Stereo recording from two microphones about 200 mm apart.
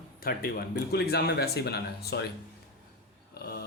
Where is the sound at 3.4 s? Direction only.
50° left (ahead or behind).